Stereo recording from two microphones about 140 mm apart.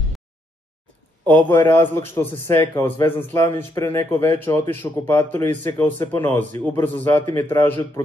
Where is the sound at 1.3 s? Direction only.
15° left (ahead or behind).